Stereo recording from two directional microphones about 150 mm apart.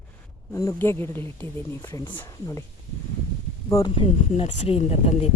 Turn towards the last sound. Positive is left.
turn(degrees=45)  # may be behind; listen again after turning